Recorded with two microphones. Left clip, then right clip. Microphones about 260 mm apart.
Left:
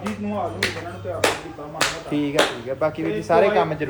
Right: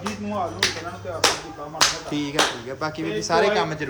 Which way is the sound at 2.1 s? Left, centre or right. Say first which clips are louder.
Left 2 dB; centre.